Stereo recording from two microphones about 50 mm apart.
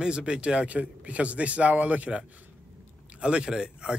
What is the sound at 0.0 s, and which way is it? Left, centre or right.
A man's voice, centre.